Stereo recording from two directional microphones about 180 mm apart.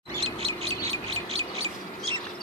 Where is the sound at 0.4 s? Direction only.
35° right (ahead or behind).